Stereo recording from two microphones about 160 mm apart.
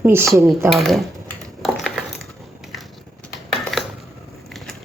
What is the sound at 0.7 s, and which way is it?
Speech, centre (ahead or behind).